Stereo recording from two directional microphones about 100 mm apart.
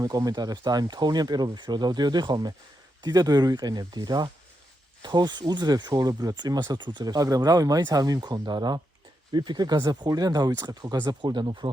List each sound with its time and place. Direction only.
0.0 s speech: 35° right (ahead or behind)